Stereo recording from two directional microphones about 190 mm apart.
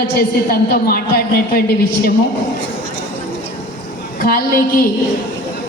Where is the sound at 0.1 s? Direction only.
55° left (ahead or behind).